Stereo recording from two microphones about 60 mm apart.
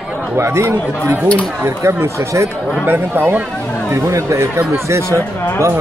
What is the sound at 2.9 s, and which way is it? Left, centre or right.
Speech, right.